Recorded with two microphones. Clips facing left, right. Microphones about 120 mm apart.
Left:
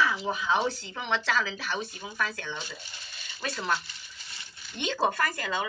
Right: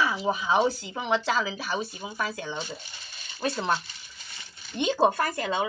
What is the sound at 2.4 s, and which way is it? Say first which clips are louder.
Speech: right 4 dB; 35° right (ahead or behind).